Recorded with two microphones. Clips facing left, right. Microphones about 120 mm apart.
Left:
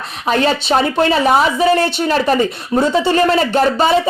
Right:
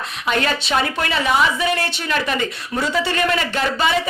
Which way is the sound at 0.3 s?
35° left (ahead or behind).